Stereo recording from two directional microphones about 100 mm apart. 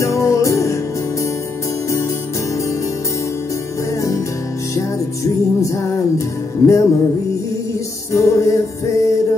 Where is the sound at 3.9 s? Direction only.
30° left (ahead or behind).